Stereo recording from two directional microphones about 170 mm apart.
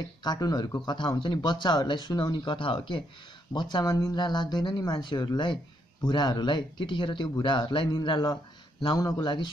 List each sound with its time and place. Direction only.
0.2 s speech: 25° left (ahead or behind)